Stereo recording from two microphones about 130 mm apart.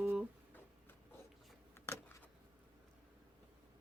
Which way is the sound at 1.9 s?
15° left (ahead or behind).